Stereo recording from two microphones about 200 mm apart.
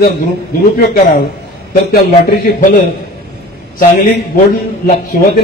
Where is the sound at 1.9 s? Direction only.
45° left (ahead or behind).